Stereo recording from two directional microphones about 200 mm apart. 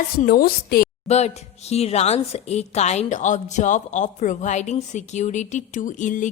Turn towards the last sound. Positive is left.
turn(degrees=40)  # may be behind; listen again after turning